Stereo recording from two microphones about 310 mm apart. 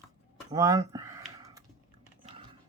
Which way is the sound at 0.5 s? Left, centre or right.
Centre.